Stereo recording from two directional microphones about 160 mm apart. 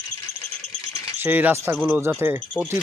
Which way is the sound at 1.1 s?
10° right (ahead or behind).